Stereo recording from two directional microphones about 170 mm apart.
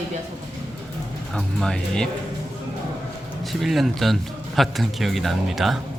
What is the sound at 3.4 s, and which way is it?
A man's voice, centre (ahead or behind).